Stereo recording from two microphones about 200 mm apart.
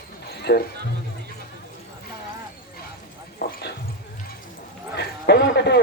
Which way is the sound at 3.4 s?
55° left (ahead or behind).